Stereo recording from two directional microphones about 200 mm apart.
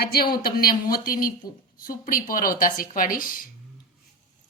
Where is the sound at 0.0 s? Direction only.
50° left (ahead or behind).